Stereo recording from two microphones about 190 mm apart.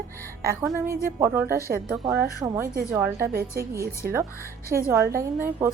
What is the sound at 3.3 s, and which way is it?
Speech, 50° right (ahead or behind).